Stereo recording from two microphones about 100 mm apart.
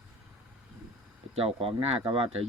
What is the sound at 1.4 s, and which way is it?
Speech, 70° right (ahead or behind).